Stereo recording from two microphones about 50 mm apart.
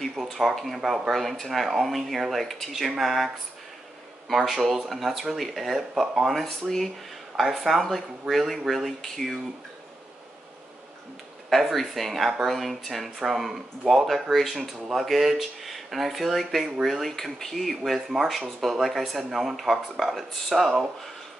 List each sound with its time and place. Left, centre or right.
0.1 s speech: centre
4.3 s speech: centre
6.3 s speech: centre
11.5 s speech: centre
17.1 s speech: centre